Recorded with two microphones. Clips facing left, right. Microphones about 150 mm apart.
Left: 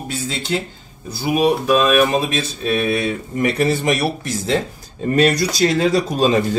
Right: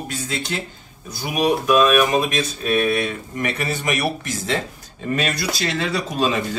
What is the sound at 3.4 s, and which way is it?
Speech, 35° left (ahead or behind).